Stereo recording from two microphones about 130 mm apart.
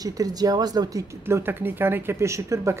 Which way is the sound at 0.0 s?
30° right (ahead or behind).